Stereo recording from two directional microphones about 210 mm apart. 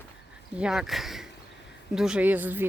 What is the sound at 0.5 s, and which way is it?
Speech, 5° right (ahead or behind).